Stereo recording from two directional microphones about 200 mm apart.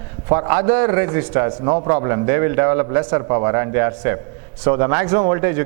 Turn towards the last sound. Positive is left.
turn(degrees=-15)  # may be behind; listen again after turning